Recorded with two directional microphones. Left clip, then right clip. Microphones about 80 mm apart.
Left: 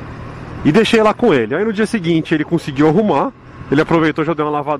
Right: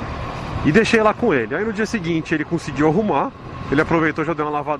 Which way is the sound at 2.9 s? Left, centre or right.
Centre.